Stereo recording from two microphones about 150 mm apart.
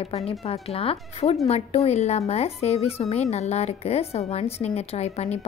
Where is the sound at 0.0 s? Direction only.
45° left (ahead or behind).